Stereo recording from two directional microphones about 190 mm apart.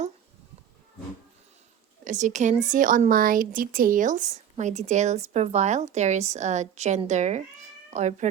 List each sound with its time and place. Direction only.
2.0 s a woman's voice: 40° right (ahead or behind)